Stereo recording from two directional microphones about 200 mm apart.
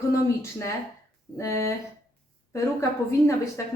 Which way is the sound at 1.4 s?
15° left (ahead or behind).